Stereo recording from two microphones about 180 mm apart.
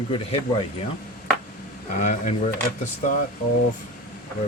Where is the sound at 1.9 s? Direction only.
40° left (ahead or behind).